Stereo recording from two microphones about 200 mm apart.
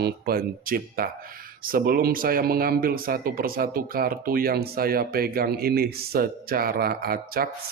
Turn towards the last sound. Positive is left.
turn(degrees=-50)  # may be behind; listen again after turning